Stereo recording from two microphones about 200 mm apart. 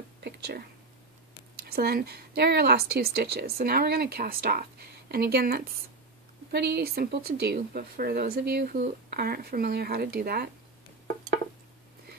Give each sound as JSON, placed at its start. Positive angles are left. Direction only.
{"t": 0.2, "sound": "speech", "side_deg": -55}